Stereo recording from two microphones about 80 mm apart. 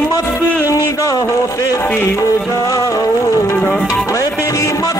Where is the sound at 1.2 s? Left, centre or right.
Left.